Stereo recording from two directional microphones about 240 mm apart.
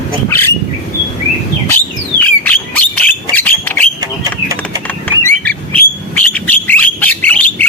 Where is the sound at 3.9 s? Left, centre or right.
Centre.